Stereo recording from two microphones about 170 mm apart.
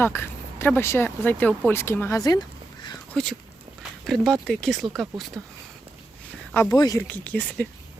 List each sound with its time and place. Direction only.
0.0 s speech: 15° left (ahead or behind)
4.0 s speech: centre (ahead or behind)
6.5 s speech: 10° left (ahead or behind)
7.1 s speech: 10° left (ahead or behind)